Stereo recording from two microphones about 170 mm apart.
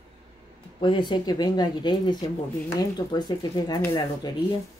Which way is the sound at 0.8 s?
30° left (ahead or behind).